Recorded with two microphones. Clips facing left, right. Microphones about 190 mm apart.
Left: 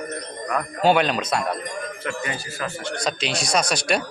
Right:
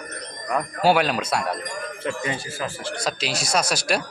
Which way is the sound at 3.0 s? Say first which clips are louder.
Left 1 dB; 5° right (ahead or behind).